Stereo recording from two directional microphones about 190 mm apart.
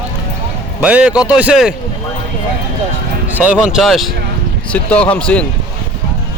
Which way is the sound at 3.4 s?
5° right (ahead or behind).